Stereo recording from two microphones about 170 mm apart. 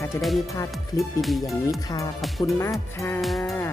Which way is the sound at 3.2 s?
Centre (ahead or behind).